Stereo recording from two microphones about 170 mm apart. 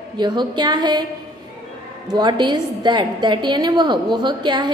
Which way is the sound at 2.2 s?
25° right (ahead or behind).